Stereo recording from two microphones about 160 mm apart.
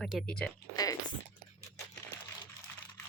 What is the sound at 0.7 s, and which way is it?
Speech, 25° left (ahead or behind).